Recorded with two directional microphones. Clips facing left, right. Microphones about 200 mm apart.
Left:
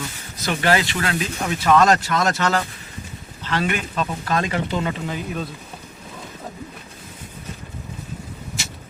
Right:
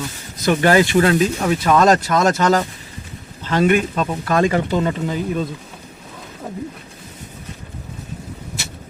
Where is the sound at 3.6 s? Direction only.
50° right (ahead or behind).